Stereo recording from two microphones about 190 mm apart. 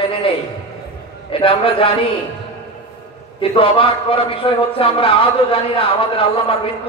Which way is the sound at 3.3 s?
30° left (ahead or behind).